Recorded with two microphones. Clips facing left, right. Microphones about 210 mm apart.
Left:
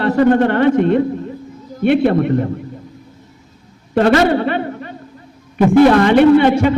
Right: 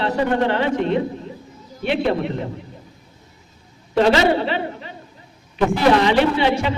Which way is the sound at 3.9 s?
55° left (ahead or behind).